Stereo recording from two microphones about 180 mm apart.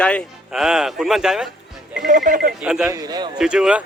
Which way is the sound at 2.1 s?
50° right (ahead or behind).